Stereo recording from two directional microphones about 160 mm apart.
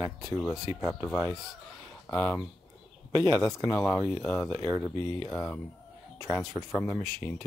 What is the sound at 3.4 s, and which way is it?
Speech, centre (ahead or behind).